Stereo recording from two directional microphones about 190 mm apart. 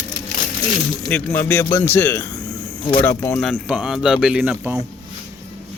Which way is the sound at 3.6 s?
5° right (ahead or behind).